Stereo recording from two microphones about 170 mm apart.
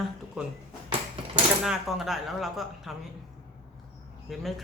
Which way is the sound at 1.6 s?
Centre (ahead or behind).